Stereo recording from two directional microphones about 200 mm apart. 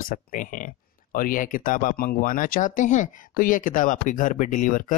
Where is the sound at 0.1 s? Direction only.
40° left (ahead or behind).